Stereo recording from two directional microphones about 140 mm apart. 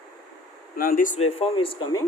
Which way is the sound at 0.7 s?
90° left.